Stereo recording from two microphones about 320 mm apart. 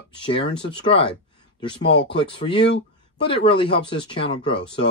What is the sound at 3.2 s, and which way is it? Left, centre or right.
Speech, centre.